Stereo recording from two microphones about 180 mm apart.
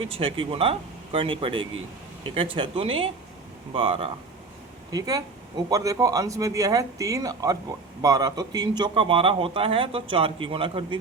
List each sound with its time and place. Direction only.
0.0 s speech: 30° right (ahead or behind)